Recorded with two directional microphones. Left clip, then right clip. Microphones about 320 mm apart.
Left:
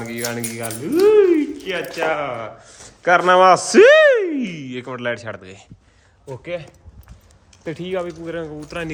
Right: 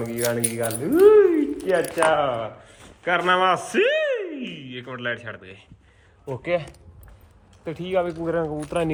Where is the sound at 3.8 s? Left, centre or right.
Left.